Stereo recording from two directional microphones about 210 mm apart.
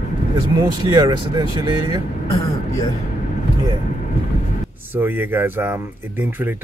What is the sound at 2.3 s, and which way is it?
Speech, 15° left (ahead or behind).